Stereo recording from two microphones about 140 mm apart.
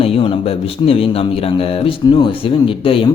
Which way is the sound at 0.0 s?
40° left (ahead or behind).